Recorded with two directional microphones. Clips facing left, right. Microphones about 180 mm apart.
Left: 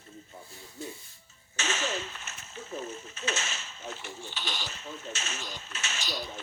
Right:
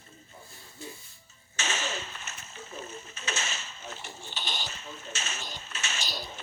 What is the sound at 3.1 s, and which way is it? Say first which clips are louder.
Speech: left 1 dB; 35° right (ahead or behind).